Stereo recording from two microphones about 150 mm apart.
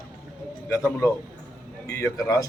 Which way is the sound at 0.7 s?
20° left (ahead or behind).